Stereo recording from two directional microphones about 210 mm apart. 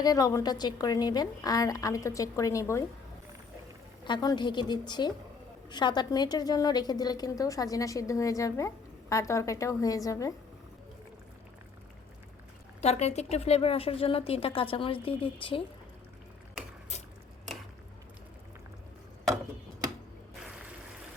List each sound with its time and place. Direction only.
0.0 s a woman's voice: 15° left (ahead or behind)
4.0 s a woman's voice: 20° left (ahead or behind)
12.8 s a woman's voice: 30° left (ahead or behind)